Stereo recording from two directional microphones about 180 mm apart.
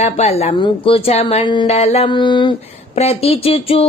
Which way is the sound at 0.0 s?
35° left (ahead or behind).